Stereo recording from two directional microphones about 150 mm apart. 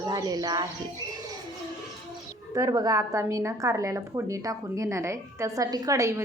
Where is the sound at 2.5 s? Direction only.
25° right (ahead or behind).